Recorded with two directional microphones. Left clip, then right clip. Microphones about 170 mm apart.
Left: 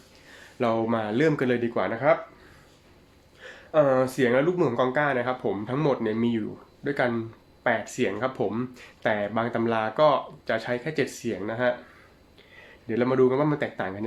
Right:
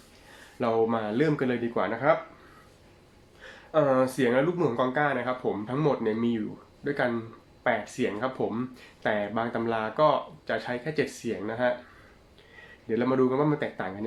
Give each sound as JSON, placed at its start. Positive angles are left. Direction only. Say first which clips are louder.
{"t": 0.6, "sound": "speech", "louder": "left 1 dB", "side_deg": 40}
{"t": 3.4, "sound": "speech", "louder": "left 3 dB", "side_deg": 35}
{"t": 12.9, "sound": "speech", "louder": "left 3 dB", "side_deg": 40}